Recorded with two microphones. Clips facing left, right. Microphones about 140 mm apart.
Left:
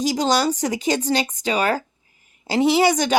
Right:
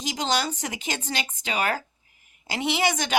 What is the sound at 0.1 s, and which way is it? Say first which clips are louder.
A woman's voice: left 3 dB; 40° left (ahead or behind).